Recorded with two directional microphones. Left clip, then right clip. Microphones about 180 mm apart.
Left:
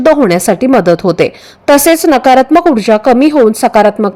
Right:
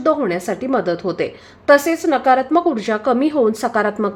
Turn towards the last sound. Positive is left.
turn(degrees=30)  # may be behind; listen again after turning